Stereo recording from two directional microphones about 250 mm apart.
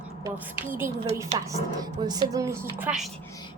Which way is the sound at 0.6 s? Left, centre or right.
Centre.